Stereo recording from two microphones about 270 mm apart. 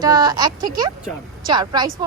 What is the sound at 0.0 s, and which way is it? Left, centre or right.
Speech, centre.